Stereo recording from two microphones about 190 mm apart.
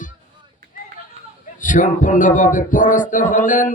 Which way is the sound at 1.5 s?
45° left (ahead or behind).